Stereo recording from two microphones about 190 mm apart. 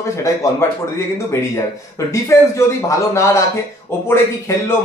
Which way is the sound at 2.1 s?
15° left (ahead or behind).